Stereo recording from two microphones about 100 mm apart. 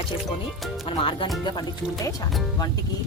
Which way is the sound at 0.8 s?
60° left (ahead or behind).